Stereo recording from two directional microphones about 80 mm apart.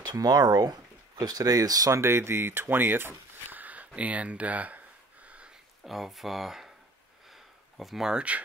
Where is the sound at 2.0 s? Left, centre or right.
Right.